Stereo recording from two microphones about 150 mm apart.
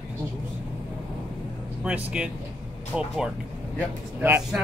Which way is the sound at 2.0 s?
10° right (ahead or behind).